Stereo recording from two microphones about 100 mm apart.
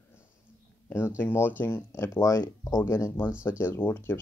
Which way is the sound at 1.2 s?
20° left (ahead or behind).